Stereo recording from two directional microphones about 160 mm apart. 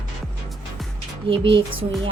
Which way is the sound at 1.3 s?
35° right (ahead or behind).